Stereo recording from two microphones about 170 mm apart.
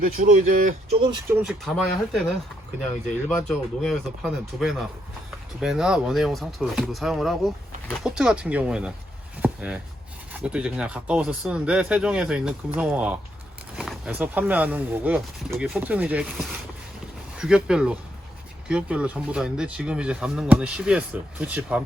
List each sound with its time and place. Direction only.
0.0 s speech: 50° right (ahead or behind)
1.3 s speech: 10° right (ahead or behind)
1.6 s speech: centre (ahead or behind)
3.2 s speech: 5° left (ahead or behind)